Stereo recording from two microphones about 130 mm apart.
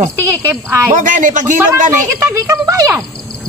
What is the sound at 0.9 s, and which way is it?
Speech, 75° right (ahead or behind).